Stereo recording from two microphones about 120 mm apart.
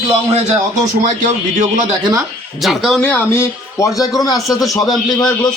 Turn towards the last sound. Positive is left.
turn(degrees=30)  # may be behind; listen again after turning